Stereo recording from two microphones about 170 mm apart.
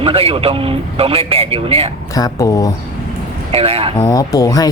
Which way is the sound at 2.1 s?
20° left (ahead or behind).